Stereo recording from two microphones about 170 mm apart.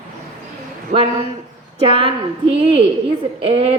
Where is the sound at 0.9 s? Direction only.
45° right (ahead or behind).